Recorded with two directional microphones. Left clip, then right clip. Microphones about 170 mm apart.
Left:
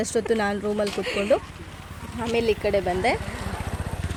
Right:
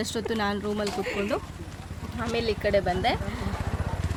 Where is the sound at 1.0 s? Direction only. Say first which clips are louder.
Left 6 dB; 5° left (ahead or behind).